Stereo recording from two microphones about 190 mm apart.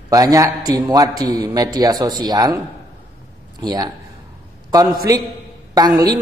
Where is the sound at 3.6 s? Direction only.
20° right (ahead or behind).